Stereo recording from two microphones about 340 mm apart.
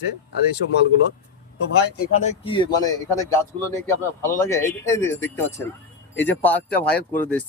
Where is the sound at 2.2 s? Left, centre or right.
Centre.